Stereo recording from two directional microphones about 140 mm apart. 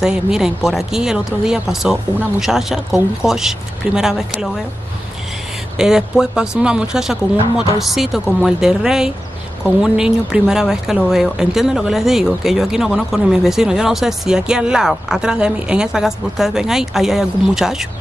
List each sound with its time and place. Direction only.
0.0 s speech: 5° right (ahead or behind)
5.8 s speech: 5° right (ahead or behind)